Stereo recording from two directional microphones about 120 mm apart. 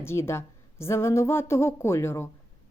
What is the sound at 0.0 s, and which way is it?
A woman's voice, 20° left (ahead or behind).